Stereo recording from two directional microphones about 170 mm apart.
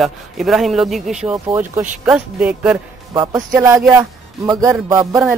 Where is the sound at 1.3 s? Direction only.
15° right (ahead or behind).